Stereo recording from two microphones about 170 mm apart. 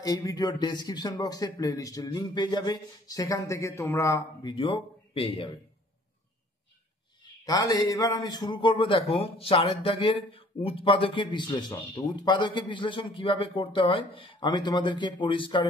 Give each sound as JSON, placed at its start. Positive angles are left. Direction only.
{"t": 0.0, "sound": "a man's voice", "side_deg": 20}
{"t": 7.4, "sound": "a man's voice", "side_deg": 20}